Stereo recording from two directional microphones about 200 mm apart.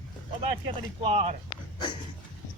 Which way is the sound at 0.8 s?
30° right (ahead or behind).